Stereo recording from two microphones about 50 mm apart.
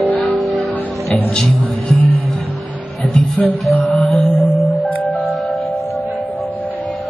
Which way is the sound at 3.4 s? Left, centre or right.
Left.